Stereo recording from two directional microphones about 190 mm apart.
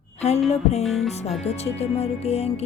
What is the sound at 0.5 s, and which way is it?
Speech, 35° left (ahead or behind).